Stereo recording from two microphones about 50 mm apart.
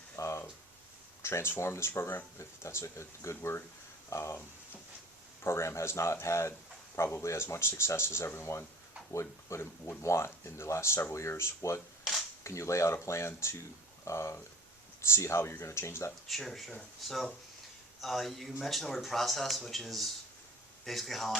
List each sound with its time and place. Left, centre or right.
0.2 s a sound: left
1.2 s speech: left
5.4 s speech: left
12.4 s speech: left
16.2 s speech: centre